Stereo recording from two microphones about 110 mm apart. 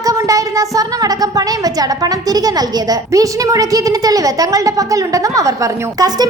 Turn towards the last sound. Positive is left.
turn(degrees=-30)  # may be behind; listen again after turning